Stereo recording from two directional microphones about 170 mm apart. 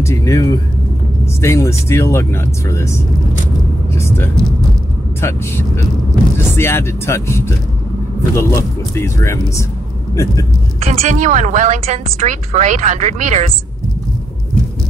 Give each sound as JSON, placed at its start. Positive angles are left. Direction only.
{"t": 0.0, "sound": "speech", "side_deg": 15}
{"t": 3.9, "sound": "vehicle", "side_deg": 15}
{"t": 5.2, "sound": "speech", "side_deg": 15}
{"t": 10.9, "sound": "a woman's voice", "side_deg": -45}